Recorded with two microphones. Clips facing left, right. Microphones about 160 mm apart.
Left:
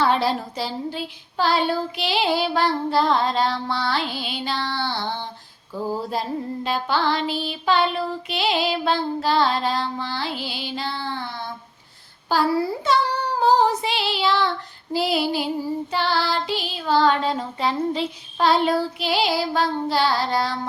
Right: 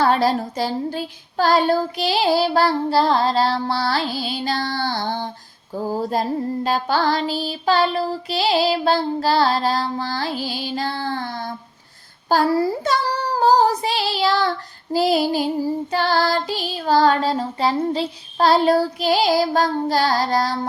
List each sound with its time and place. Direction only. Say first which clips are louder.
0.0 s female singing: right 3 dB; 40° right (ahead or behind)